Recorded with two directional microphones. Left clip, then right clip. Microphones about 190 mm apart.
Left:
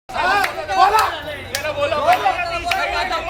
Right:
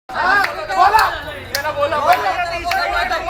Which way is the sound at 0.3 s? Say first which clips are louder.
Right 3 dB; 35° left (ahead or behind).